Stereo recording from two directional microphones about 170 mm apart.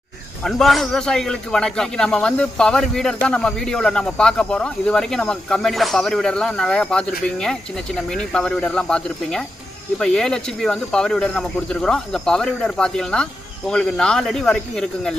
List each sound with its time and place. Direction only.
0.4 s a man's voice: centre (ahead or behind)